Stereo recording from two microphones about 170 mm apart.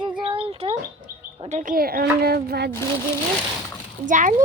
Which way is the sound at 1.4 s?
45° right (ahead or behind).